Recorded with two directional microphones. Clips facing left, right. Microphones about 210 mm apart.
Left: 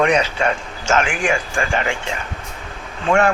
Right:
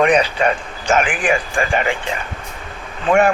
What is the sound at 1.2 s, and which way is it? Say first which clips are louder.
Speech: right 2 dB; 15° right (ahead or behind).